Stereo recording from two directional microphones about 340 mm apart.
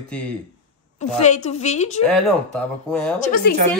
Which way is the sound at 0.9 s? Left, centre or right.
Centre.